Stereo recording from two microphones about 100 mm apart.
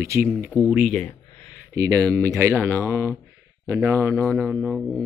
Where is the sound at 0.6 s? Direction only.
15° right (ahead or behind).